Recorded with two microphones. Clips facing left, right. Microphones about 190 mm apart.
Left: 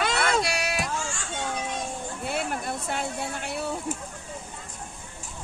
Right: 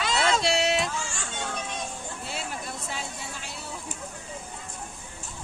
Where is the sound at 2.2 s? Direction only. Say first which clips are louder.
Left 7 dB; 55° left (ahead or behind).